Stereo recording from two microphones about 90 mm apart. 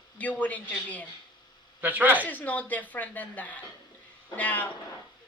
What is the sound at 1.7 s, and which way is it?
Mantra, 20° right (ahead or behind).